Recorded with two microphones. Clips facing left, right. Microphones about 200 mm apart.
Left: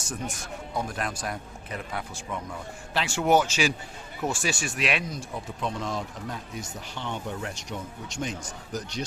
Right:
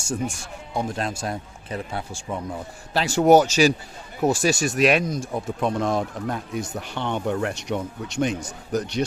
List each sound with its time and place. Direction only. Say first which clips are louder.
0.0 s speech: right 7 dB; 30° right (ahead or behind); by 9.0 s 65° right (ahead or behind)